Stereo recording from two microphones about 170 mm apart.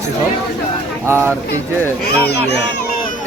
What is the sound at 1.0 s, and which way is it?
Speech, 15° right (ahead or behind).